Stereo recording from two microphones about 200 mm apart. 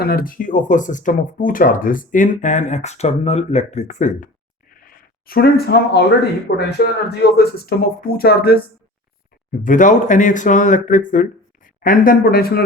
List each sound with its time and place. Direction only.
0.0 s speech: 45° left (ahead or behind)
4.7 s a sound: 45° left (ahead or behind)
6.6 s speech: 55° left (ahead or behind)